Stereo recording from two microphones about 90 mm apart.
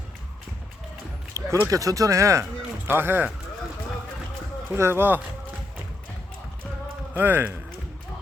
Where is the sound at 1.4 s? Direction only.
35° right (ahead or behind).